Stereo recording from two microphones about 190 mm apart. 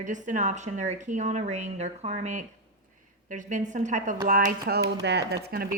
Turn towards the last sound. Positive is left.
turn(degrees=-55)  # may be behind; listen again after turning